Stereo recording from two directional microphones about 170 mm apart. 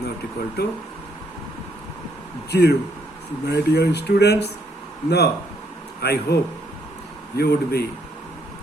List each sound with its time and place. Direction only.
0.6 s speech: 70° left (ahead or behind)
2.5 s speech: 75° left (ahead or behind)